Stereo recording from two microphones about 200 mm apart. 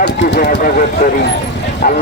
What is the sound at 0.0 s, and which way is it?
Speech, 50° left (ahead or behind).